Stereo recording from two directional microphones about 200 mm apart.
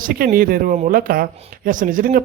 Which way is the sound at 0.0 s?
45° right (ahead or behind).